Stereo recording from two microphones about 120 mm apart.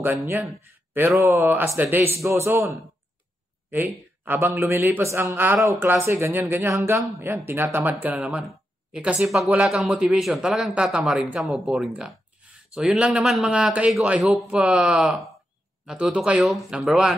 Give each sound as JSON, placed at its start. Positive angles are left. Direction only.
{"t": 0.0, "sound": "a man's voice", "side_deg": -20}
{"t": 8.2, "sound": "speech", "side_deg": 0}